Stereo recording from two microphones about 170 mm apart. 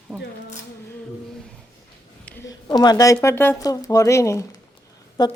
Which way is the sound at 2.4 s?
25° left (ahead or behind).